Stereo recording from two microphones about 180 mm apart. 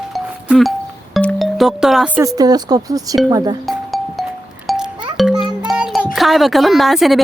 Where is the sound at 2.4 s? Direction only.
20° right (ahead or behind).